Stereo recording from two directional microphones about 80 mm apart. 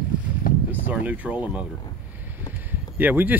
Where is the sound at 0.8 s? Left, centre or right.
Centre.